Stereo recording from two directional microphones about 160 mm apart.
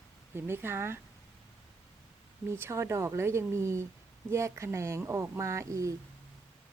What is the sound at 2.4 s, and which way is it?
Speech, 15° right (ahead or behind).